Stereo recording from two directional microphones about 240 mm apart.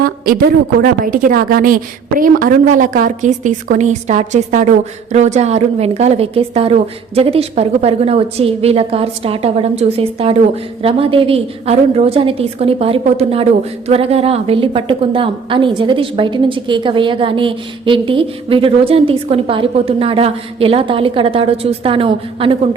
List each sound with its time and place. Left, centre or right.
0.0 s a woman's voice: right